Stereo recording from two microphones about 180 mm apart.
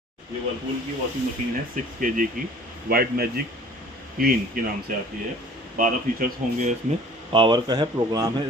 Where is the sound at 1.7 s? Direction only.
50° right (ahead or behind).